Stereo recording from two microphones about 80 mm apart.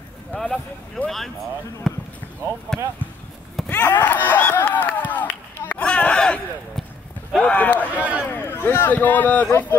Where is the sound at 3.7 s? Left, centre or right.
Left.